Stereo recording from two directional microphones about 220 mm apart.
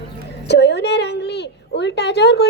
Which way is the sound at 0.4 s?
50° left (ahead or behind).